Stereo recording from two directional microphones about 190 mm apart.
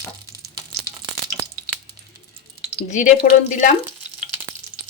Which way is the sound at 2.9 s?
40° left (ahead or behind).